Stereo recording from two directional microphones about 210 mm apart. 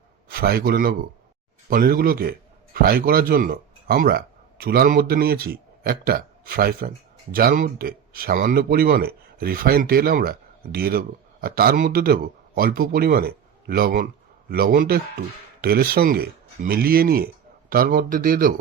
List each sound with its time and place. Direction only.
0.3 s a man's voice: 45° right (ahead or behind)